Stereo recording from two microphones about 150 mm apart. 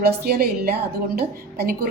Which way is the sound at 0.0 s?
90° right.